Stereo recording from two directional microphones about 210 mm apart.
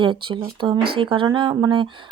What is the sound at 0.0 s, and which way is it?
Speech, 25° right (ahead or behind).